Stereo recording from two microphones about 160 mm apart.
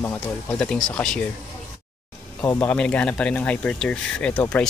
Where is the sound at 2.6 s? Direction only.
10° left (ahead or behind).